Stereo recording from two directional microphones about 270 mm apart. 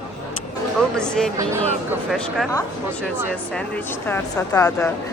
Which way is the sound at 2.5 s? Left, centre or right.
Centre.